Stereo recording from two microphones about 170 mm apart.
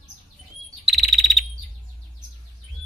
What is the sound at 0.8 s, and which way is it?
Bird, centre (ahead or behind).